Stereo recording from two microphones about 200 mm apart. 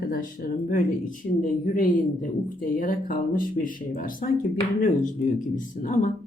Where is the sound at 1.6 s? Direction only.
40° left (ahead or behind).